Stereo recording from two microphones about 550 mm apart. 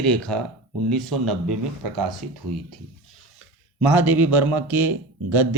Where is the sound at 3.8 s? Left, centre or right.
Centre.